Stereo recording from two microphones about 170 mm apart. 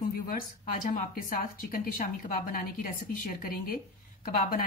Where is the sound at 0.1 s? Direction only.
55° left (ahead or behind).